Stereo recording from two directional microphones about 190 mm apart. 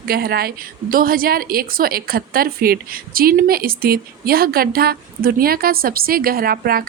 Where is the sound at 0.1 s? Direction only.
55° right (ahead or behind).